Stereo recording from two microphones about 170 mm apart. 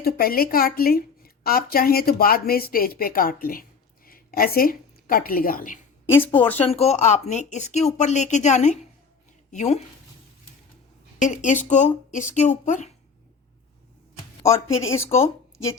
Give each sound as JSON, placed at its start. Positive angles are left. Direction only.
{"t": 0.0, "sound": "a woman's voice", "side_deg": 60}
{"t": 6.1, "sound": "speech", "side_deg": 10}
{"t": 6.6, "sound": "speech", "side_deg": 40}
{"t": 11.2, "sound": "speech", "side_deg": 50}
{"t": 14.4, "sound": "speech", "side_deg": 15}